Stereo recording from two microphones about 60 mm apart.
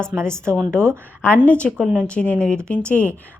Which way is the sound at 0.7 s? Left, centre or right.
Right.